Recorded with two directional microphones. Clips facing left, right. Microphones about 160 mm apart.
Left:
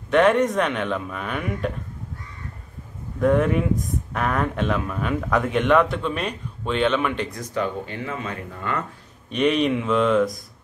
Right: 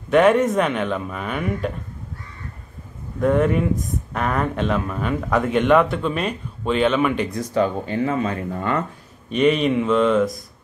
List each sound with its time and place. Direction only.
0.1 s speech: 5° right (ahead or behind)
3.2 s speech: centre (ahead or behind)
7.3 s speech: 35° right (ahead or behind)
9.3 s speech: centre (ahead or behind)